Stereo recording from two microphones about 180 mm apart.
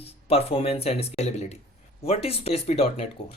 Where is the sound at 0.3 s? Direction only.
35° left (ahead or behind).